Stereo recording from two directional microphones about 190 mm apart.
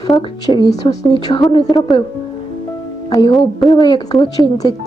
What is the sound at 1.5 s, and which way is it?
Speech, 25° left (ahead or behind).